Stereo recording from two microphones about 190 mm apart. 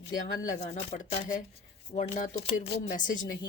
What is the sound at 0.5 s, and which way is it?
Speech, 40° left (ahead or behind).